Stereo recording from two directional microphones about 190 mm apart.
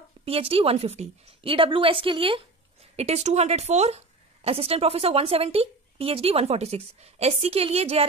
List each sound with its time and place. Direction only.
0.2 s a woman's voice: 30° right (ahead or behind)